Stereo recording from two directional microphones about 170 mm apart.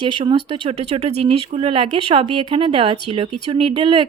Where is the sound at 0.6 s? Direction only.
40° right (ahead or behind).